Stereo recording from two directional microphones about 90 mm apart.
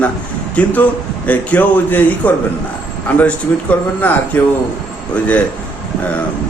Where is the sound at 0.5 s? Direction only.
15° left (ahead or behind).